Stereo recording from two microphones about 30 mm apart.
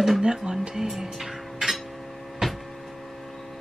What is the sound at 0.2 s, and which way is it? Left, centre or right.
Speech, right.